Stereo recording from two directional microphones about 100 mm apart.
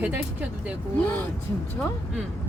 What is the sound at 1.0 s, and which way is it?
Speech, 15° left (ahead or behind).